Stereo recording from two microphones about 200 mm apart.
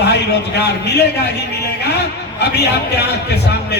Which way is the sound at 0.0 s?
55° left (ahead or behind).